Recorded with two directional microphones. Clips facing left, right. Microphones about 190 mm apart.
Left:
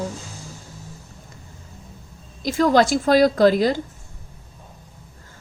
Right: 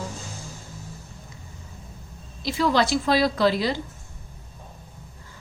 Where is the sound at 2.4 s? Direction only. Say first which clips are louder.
Left 5 dB; 45° left (ahead or behind).